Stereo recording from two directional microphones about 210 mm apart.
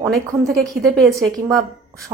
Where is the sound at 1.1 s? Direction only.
15° right (ahead or behind).